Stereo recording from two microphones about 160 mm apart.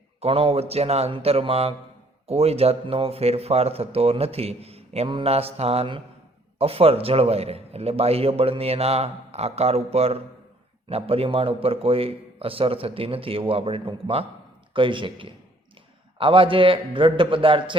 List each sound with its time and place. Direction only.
0.2 s speech: 35° right (ahead or behind)